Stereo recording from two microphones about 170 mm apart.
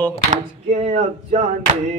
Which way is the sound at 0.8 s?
40° right (ahead or behind).